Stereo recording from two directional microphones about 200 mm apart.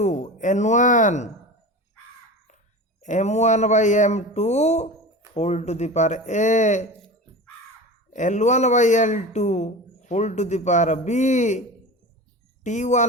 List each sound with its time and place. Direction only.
0.0 s speech: 35° left (ahead or behind)
3.0 s speech: 35° left (ahead or behind)
8.1 s speech: 40° left (ahead or behind)
12.6 s speech: 35° left (ahead or behind)